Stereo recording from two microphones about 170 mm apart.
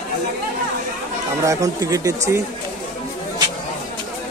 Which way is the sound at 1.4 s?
20° right (ahead or behind).